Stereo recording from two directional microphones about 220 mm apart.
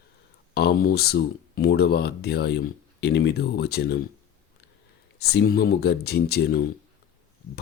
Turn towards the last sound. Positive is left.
turn(degrees=45)  # may be behind; listen again after turning